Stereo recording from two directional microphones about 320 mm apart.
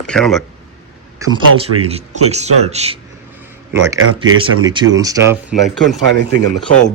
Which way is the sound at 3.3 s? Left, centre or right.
Centre.